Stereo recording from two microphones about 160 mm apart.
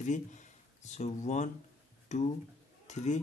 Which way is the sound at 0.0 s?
50° left (ahead or behind).